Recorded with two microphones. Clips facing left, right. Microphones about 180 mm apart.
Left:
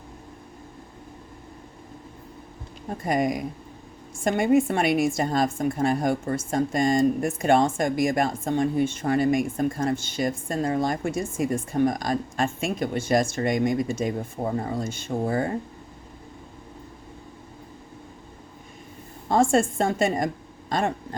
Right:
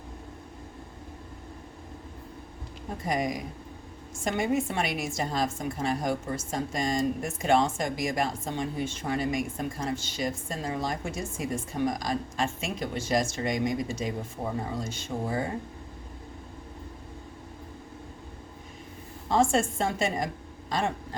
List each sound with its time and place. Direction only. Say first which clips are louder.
3.1 s a woman's voice: left 5 dB; 50° left (ahead or behind)
19.3 s a woman's voice: left 4 dB; 50° left (ahead or behind)